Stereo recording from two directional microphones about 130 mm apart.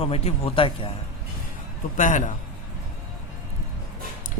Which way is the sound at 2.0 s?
80° left.